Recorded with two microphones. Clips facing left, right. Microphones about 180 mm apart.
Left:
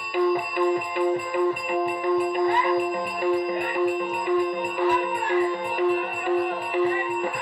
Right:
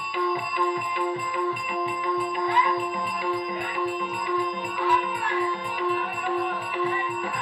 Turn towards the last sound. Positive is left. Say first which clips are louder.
# left 4 dB
turn(degrees=45)  # may be behind; listen again after turning